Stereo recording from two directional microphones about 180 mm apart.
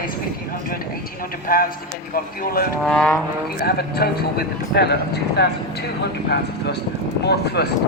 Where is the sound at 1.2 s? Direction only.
55° left (ahead or behind).